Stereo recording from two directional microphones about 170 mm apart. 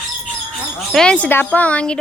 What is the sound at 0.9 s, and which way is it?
A woman's voice, 5° left (ahead or behind).